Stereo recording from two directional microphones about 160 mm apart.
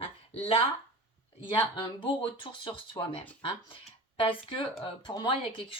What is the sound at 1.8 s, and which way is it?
Speech, 30° left (ahead or behind).